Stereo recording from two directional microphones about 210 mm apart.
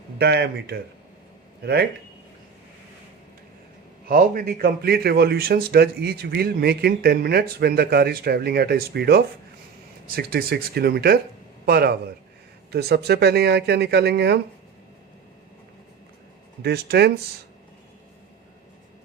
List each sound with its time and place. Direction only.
0.2 s a man's voice: 50° right (ahead or behind)
4.1 s a man's voice: 45° right (ahead or behind)
16.6 s a man's voice: 50° right (ahead or behind)